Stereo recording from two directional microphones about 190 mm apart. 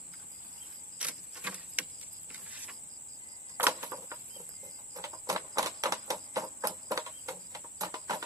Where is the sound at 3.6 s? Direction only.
15° right (ahead or behind).